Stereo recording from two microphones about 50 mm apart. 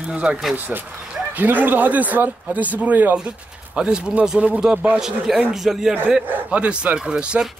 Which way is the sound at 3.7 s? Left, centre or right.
Right.